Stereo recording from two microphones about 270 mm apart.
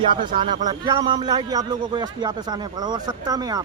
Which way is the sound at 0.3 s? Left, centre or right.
Centre.